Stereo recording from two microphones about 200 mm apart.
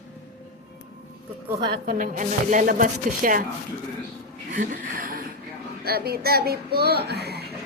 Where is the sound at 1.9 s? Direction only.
40° right (ahead or behind).